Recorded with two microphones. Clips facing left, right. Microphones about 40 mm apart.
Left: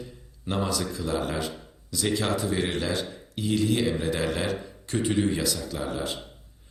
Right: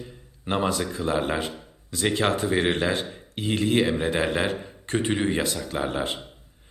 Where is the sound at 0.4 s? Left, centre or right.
Right.